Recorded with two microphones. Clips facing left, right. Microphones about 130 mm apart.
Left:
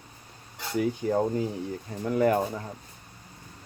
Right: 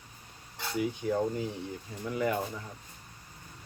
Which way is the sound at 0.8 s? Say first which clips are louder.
Left 4 dB; 40° left (ahead or behind).